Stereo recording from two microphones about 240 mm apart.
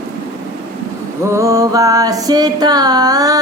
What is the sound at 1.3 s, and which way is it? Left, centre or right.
Music, centre.